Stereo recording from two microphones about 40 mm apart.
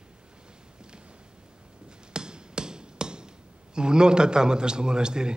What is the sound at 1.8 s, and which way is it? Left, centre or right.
Hammer, right.